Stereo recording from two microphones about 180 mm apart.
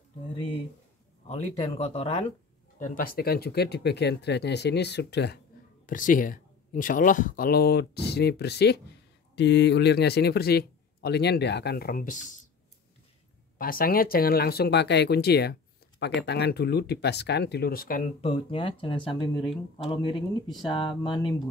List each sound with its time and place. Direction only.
1.2 s speech: 35° left (ahead or behind)
2.8 s speech: 50° left (ahead or behind); by 5.4 s 65° left (ahead or behind)
5.9 s speech: 50° left (ahead or behind)
13.6 s speech: 50° left (ahead or behind)
18.2 s speech: 30° left (ahead or behind)
20.6 s speech: 25° left (ahead or behind)